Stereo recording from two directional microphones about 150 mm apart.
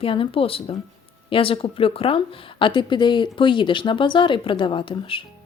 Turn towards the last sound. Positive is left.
turn(degrees=35)  # may be behind; listen again after turning